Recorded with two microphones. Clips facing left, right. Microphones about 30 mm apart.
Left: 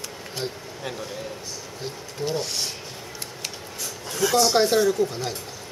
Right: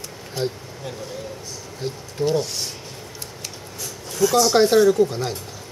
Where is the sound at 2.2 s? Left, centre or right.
Centre.